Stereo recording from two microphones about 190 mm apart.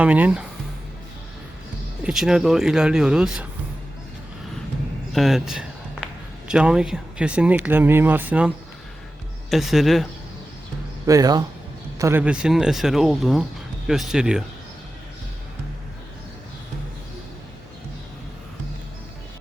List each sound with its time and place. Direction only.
0.0 s speech: 5° right (ahead or behind)
2.0 s speech: 5° right (ahead or behind)
5.1 s a sound: centre (ahead or behind)
6.5 s speech: 5° right (ahead or behind)
11.0 s speech: 20° right (ahead or behind); by 14.4 s 5° right (ahead or behind)